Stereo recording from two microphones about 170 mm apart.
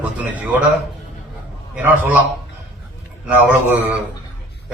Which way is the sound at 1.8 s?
10° right (ahead or behind).